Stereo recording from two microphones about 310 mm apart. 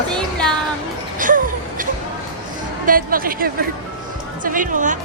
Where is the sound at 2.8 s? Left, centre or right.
Right.